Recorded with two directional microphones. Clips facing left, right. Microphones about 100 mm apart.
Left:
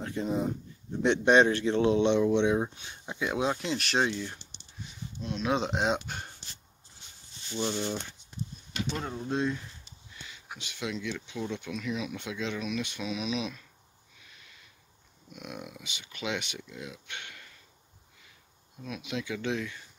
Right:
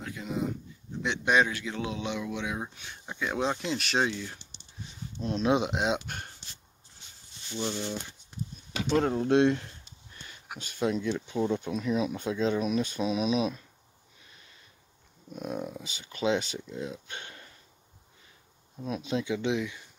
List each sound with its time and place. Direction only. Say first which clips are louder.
0.0 s speech: left 3 dB; 35° left (ahead or behind)
3.3 s speech: even; 5° left (ahead or behind)
5.2 s speech: right 4 dB; 35° right (ahead or behind)
5.7 s speech: even; centre (ahead or behind)
7.5 s speech: left 1 dB; 10° left (ahead or behind)
9.0 s speech: right 8 dB; 90° right; by 9.7 s 75° right (ahead or behind)
10.2 s speech: right 2 dB; 45° right (ahead or behind)
14.2 s a sound: even; 30° right (ahead or behind)
15.3 s speech: right 7 dB; 35° right (ahead or behind)
18.8 s speech: right 5 dB; 35° right (ahead or behind); by 19.8 s 15° right (ahead or behind)